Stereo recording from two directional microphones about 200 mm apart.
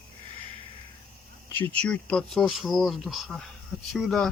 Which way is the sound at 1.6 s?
5° left (ahead or behind).